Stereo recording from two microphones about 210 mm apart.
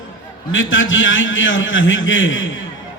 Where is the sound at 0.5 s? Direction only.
70° left (ahead or behind).